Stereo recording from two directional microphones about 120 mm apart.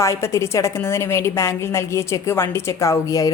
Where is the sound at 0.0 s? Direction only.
25° left (ahead or behind).